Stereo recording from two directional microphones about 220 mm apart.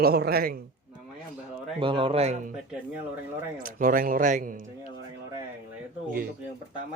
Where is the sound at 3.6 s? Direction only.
40° right (ahead or behind).